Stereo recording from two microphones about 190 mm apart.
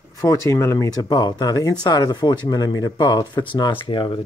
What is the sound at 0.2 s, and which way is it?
Speech, 15° left (ahead or behind).